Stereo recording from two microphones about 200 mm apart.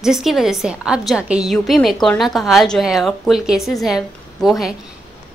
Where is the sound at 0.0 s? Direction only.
Centre (ahead or behind).